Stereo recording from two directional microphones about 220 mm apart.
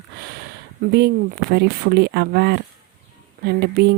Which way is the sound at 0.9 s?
45° right (ahead or behind).